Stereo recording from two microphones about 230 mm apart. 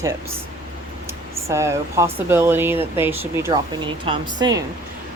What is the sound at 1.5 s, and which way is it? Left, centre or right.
A woman's voice, centre.